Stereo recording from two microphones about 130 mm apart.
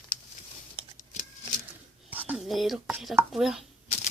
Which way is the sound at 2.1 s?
10° right (ahead or behind).